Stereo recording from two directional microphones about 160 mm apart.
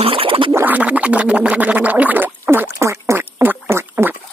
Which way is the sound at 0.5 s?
10° right (ahead or behind).